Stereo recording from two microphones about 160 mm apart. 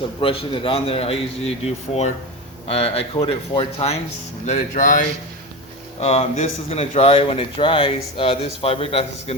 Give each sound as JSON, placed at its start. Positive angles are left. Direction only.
{"t": 0.2, "sound": "speech", "side_deg": 35}
{"t": 6.0, "sound": "speech", "side_deg": 40}